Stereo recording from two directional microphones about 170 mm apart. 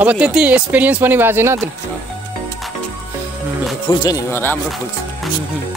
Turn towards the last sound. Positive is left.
turn(degrees=15)  # may be behind; listen again after turning